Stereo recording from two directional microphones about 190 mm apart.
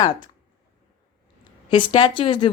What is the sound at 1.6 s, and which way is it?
Speech, 25° left (ahead or behind).